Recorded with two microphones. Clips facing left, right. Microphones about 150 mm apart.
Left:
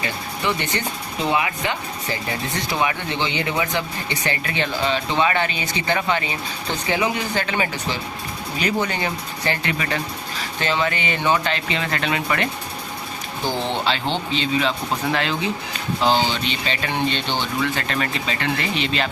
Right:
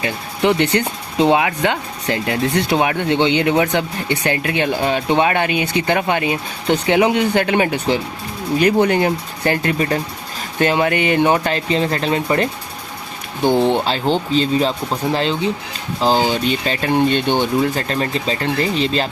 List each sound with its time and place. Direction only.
0.4 s speech: 70° right (ahead or behind)
1.2 s speech: 85° right; by 12.5 s 35° right (ahead or behind)
13.8 s speech: 40° right (ahead or behind)
15.1 s speech: 30° right (ahead or behind)
16.0 s speech: 40° right (ahead or behind)